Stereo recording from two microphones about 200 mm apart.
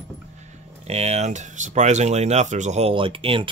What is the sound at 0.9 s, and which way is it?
Speech, 30° right (ahead or behind).